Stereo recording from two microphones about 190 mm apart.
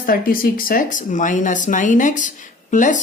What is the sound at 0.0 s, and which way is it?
Speech, 50° left (ahead or behind).